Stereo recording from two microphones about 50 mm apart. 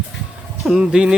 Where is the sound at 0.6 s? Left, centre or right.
Centre.